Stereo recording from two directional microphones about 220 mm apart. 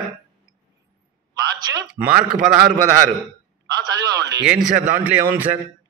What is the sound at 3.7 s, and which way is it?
Speech, 15° right (ahead or behind).